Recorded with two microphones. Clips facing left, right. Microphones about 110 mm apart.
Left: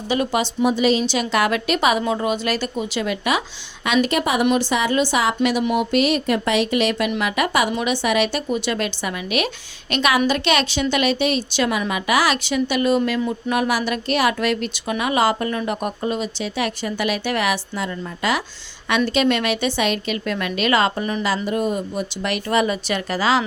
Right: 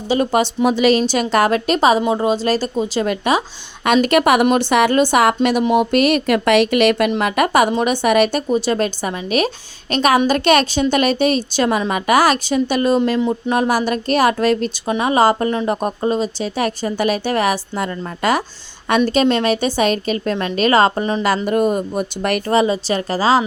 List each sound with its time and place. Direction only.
0.1 s speech: 40° right (ahead or behind)
0.6 s a woman's voice: 85° right
1.0 s speech: 45° right (ahead or behind)
3.8 s speech: 55° right (ahead or behind)
7.2 s a woman's voice: 45° right (ahead or behind)
21.4 s a woman's voice: 50° right (ahead or behind)
22.5 s speech: 30° right (ahead or behind)